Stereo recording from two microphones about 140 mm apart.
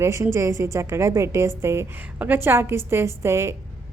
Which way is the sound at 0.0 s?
20° right (ahead or behind).